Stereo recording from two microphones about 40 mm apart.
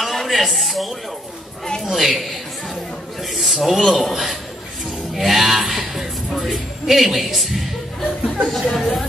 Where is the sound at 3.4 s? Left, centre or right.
Centre.